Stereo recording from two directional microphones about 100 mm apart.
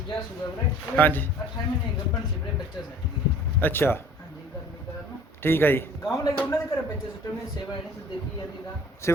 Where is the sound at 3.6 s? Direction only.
20° left (ahead or behind).